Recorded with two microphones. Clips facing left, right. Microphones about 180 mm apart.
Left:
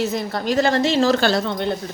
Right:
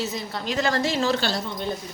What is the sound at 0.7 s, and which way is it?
Speech, 25° left (ahead or behind).